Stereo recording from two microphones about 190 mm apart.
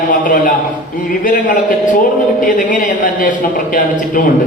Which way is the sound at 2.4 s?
45° left (ahead or behind).